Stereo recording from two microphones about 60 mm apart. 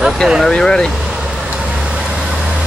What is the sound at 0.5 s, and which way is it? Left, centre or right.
Speech, centre.